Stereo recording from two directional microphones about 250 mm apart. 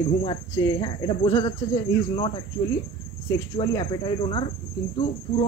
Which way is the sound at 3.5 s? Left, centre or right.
Centre.